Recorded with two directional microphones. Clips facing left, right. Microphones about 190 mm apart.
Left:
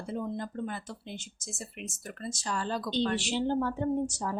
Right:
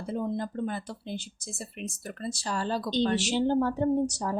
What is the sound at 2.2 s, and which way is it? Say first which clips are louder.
Speech: right 3 dB; 35° right (ahead or behind).